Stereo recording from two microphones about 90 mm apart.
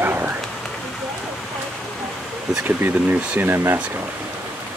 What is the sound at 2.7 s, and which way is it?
Speech, 20° right (ahead or behind).